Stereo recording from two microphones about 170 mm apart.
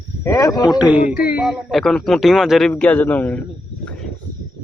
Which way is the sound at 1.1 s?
60° left (ahead or behind).